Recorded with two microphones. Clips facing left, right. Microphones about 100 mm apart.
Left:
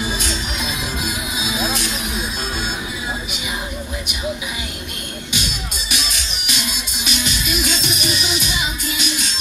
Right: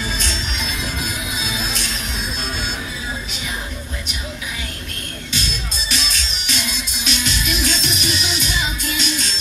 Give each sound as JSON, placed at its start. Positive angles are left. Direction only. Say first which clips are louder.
{"t": 0.0, "sound": "music", "louder": "left 2 dB", "side_deg": 10}
{"t": 5.9, "sound": "music", "louder": "right 1 dB", "side_deg": 10}